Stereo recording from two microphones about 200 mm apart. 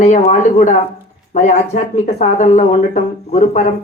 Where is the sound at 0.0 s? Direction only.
35° left (ahead or behind).